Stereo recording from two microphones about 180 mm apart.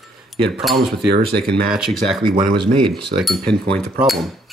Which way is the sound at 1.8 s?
Centre (ahead or behind).